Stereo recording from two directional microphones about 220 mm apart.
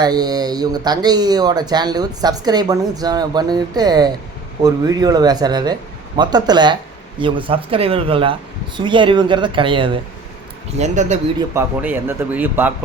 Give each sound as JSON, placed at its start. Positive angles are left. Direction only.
{"t": 0.0, "sound": "speech", "side_deg": -20}
{"t": 11.3, "sound": "speech", "side_deg": -10}